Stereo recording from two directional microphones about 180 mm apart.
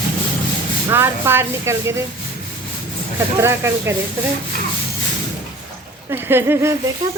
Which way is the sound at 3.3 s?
15° right (ahead or behind).